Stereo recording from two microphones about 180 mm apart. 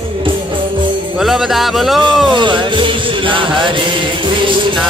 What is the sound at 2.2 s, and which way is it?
Music, 25° right (ahead or behind).